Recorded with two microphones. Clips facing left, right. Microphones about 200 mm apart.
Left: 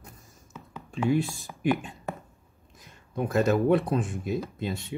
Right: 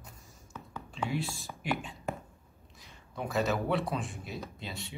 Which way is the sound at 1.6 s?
50° left (ahead or behind).